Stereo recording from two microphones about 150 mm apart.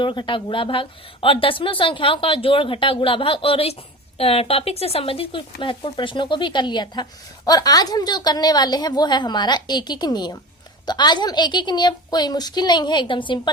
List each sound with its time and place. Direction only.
0.0 s a woman's voice: 35° left (ahead or behind)